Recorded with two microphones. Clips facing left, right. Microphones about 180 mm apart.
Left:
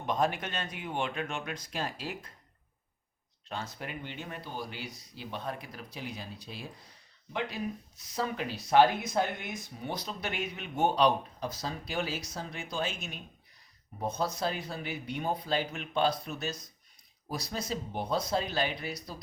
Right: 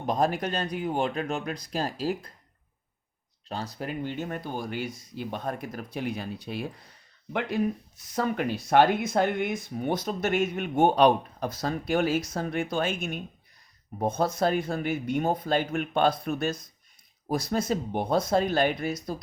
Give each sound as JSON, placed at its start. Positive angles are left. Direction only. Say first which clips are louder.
{"t": 0.0, "sound": "speech", "louder": "right 4 dB", "side_deg": -40}
{"t": 3.5, "sound": "speech", "louder": "right 6 dB", "side_deg": -35}